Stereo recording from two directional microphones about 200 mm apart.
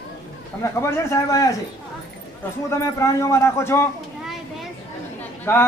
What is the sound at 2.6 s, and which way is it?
A man's voice, 15° left (ahead or behind).